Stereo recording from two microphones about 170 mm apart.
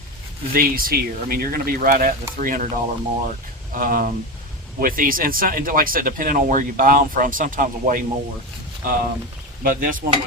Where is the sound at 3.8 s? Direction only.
55° right (ahead or behind).